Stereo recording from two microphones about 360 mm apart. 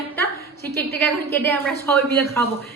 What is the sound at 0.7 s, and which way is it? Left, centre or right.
A woman's voice, centre.